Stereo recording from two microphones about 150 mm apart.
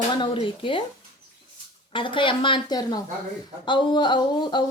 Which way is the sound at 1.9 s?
35° left (ahead or behind).